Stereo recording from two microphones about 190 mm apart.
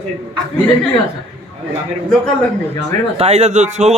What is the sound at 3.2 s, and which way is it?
Speech, 35° right (ahead or behind).